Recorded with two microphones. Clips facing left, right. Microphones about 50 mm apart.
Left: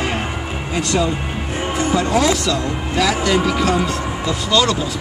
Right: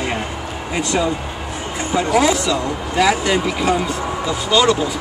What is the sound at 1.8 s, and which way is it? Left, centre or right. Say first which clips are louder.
Music: left 1 dB; right.